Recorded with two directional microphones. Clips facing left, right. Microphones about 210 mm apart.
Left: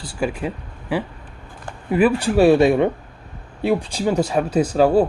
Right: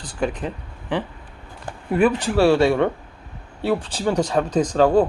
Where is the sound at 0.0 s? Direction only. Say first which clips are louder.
Left 1 dB; 10° left (ahead or behind).